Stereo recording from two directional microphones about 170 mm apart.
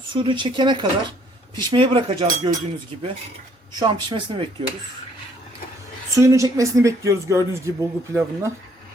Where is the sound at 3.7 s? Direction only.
25° right (ahead or behind).